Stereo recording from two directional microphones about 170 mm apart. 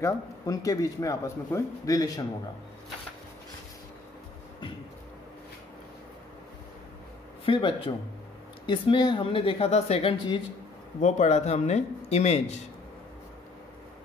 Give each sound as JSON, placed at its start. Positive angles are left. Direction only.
{"t": 0.0, "sound": "speech", "side_deg": 20}
{"t": 7.4, "sound": "speech", "side_deg": 30}
{"t": 11.0, "sound": "speech", "side_deg": 45}